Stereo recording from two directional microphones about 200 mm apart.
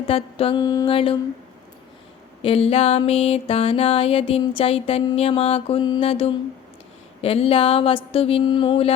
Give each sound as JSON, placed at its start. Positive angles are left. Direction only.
{"t": 0.0, "sound": "music", "side_deg": 30}
{"t": 2.4, "sound": "music", "side_deg": 30}